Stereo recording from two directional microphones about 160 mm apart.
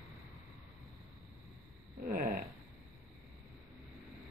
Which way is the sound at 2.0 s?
60° right (ahead or behind).